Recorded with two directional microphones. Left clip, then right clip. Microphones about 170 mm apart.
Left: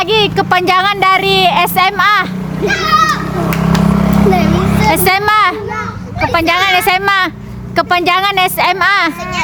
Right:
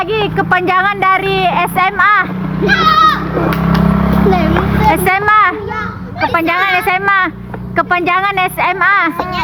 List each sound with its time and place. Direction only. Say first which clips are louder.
0.1 s speech: left 3 dB; 40° left (ahead or behind)
2.6 s a child's voice: right 2 dB; 15° left (ahead or behind)
3.8 s vehicle: left 1 dB; 65° left (ahead or behind)
4.3 s a sound: even; 15° left (ahead or behind)
4.9 s speech: even; 30° left (ahead or behind)